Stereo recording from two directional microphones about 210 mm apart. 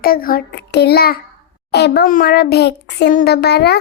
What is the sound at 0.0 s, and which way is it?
A child's voice, 45° left (ahead or behind).